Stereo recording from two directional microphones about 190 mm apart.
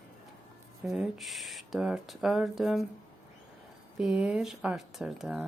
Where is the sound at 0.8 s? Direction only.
Centre (ahead or behind).